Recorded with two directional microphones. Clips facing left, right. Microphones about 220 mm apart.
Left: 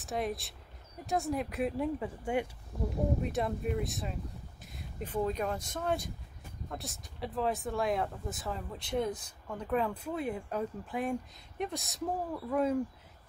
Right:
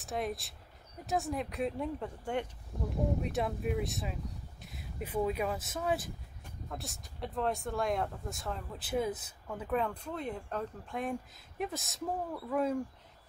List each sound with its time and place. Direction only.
0.0 s speech: centre (ahead or behind)